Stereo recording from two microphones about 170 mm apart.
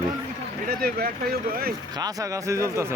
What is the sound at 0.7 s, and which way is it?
Speech, 60° right (ahead or behind).